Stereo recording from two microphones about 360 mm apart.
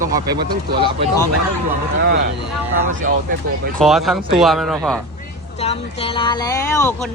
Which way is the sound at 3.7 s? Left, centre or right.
Centre.